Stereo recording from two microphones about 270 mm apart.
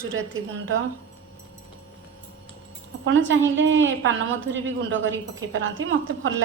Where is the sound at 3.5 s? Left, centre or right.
Right.